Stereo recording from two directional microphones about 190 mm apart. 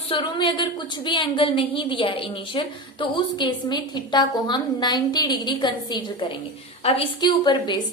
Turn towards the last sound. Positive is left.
turn(degrees=20)  # may be behind; listen again after turning